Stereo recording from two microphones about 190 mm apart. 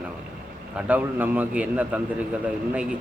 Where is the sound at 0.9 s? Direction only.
10° right (ahead or behind).